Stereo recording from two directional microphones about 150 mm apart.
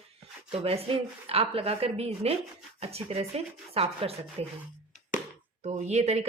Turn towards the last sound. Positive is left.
turn(degrees=-50)  # may be behind; listen again after turning